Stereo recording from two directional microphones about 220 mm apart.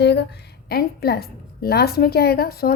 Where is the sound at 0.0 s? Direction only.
50° left (ahead or behind).